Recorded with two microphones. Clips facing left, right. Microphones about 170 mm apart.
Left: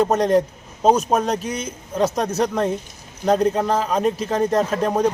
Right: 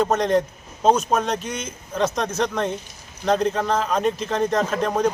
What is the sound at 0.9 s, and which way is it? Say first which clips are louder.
Speech: left 2 dB; 35° left (ahead or behind).